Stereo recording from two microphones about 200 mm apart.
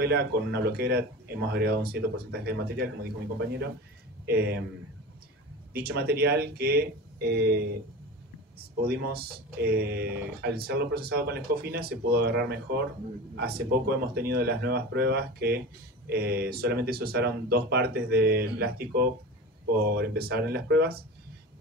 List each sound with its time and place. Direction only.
0.0 s speech: 55° right (ahead or behind)
4.3 s speech: 50° right (ahead or behind)
5.7 s speech: 50° right (ahead or behind)
8.8 s speech: 50° right (ahead or behind)